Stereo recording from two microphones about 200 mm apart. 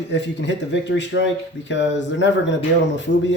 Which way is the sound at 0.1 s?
60° left (ahead or behind).